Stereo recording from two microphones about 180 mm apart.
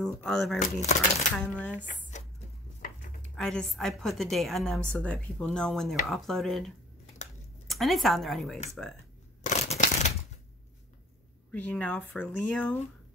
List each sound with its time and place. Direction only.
0.0 s a woman's voice: 5° left (ahead or behind)
0.6 s speech: 40° left (ahead or behind)
1.5 s speech: 5° left (ahead or behind)
1.9 s a sound: 40° left (ahead or behind)
3.2 s a woman's voice: 5° left (ahead or behind)
9.4 s a sound: 40° left (ahead or behind)
11.5 s speech: 10° left (ahead or behind)